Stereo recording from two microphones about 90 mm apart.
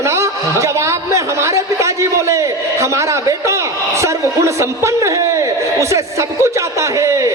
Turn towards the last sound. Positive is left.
turn(degrees=-35)  # may be behind; listen again after turning